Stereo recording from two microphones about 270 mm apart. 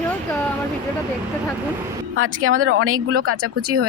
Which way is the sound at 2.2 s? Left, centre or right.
Right.